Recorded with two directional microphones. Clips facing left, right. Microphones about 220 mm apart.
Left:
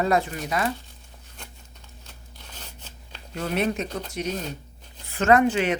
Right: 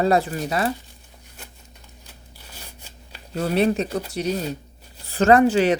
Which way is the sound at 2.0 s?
10° right (ahead or behind).